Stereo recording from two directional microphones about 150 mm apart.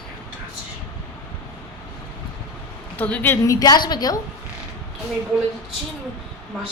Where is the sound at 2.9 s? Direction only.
10° left (ahead or behind); by 4.1 s 25° left (ahead or behind).